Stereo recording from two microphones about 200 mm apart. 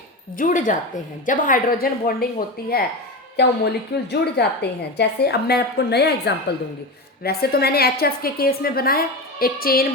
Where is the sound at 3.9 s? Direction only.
55° left (ahead or behind).